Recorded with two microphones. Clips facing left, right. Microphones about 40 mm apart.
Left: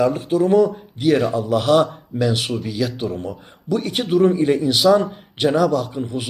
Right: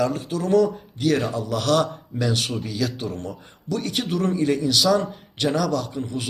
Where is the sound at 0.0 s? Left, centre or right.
Centre.